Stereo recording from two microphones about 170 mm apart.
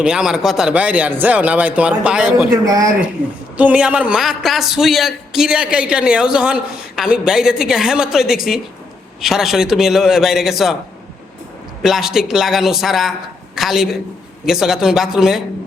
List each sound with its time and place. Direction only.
0.0 s a man's voice: 5° right (ahead or behind)
2.6 s speech: 20° right (ahead or behind)
3.6 s a man's voice: 5° right (ahead or behind)
11.8 s a man's voice: centre (ahead or behind)